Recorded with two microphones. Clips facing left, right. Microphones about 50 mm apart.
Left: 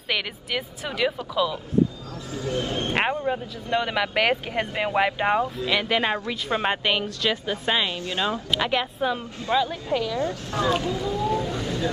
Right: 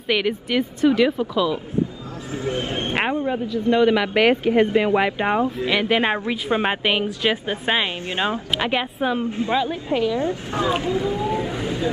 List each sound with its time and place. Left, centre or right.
0.1 s speech: centre
2.3 s a woman's voice: right
2.9 s a woman's voice: centre; by 8.4 s right
8.5 s a woman's voice: centre